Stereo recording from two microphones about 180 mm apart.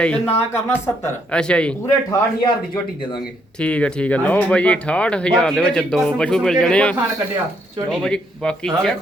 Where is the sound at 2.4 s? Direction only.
25° left (ahead or behind).